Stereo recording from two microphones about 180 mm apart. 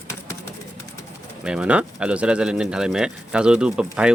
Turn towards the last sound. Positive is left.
turn(degrees=-5)  # may be behind; listen again after turning